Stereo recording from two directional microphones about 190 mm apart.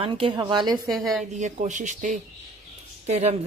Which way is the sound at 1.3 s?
40° right (ahead or behind).